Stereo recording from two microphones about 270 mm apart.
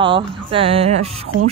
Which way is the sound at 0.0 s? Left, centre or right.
Centre.